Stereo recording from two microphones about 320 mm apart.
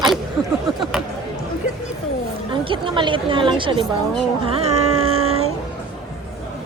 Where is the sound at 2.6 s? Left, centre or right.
Centre.